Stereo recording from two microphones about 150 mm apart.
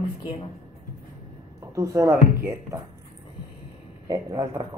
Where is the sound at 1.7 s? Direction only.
20° right (ahead or behind).